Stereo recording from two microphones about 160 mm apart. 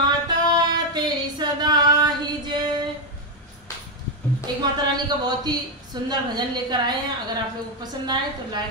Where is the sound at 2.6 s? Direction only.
25° right (ahead or behind).